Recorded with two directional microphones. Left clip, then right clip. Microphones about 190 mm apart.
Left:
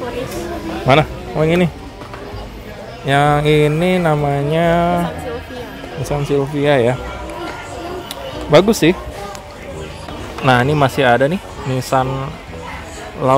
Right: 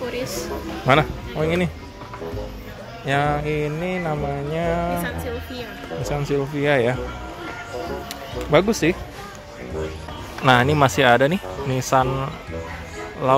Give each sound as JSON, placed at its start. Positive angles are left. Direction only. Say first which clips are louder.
{"t": 0.8, "sound": "speech", "louder": "left 5 dB", "side_deg": 10}
{"t": 3.1, "sound": "music", "louder": "left 8 dB", "side_deg": 15}
{"t": 6.0, "sound": "speech", "louder": "left 6 dB", "side_deg": 0}
{"t": 8.5, "sound": "music", "louder": "left 7 dB", "side_deg": 10}
{"t": 10.4, "sound": "speech", "louder": "left 3 dB", "side_deg": 0}